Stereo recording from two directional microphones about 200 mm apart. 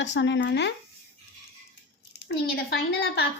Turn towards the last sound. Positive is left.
turn(degrees=55)  # may be behind; listen again after turning